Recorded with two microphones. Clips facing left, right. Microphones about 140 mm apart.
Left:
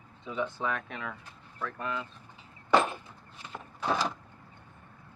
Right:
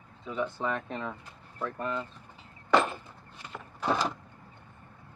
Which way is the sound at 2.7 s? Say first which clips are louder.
Even; 10° left (ahead or behind).